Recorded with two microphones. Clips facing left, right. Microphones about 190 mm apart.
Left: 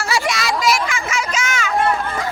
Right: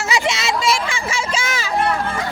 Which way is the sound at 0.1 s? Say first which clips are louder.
Even; 25° right (ahead or behind).